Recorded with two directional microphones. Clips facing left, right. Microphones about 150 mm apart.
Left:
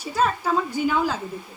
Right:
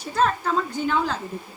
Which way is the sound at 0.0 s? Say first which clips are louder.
Even; 5° left (ahead or behind).